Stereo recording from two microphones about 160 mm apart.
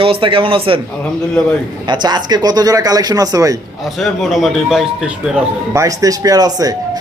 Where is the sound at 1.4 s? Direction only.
Centre (ahead or behind).